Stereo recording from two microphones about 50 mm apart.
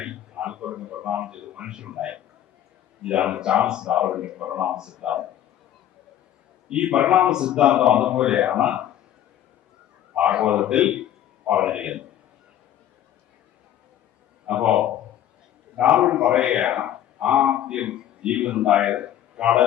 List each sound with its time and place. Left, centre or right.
0.0 s a sound: centre
3.0 s speech: right
6.7 s speech: right
10.2 s speech: right
14.4 s a man's voice: right